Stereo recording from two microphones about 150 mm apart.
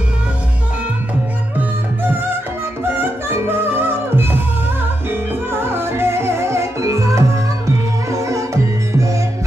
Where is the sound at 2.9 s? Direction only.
15° right (ahead or behind).